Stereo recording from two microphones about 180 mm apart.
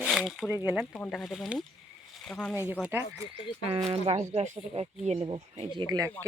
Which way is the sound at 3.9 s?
35° right (ahead or behind).